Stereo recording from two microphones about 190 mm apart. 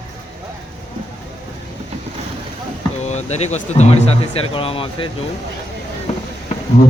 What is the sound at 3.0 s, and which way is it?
Speech, 35° left (ahead or behind).